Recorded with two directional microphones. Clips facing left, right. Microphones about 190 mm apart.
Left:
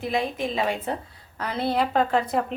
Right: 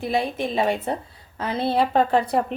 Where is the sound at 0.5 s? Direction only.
30° right (ahead or behind).